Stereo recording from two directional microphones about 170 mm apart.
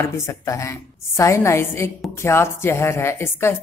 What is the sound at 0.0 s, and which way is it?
A woman's voice, 15° left (ahead or behind).